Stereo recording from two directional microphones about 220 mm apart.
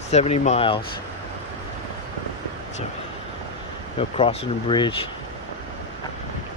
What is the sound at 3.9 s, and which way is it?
Speech, 25° left (ahead or behind).